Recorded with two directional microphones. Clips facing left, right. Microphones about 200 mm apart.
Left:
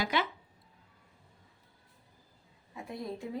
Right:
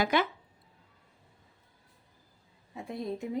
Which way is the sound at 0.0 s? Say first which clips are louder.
Right 5 dB; 50° right (ahead or behind).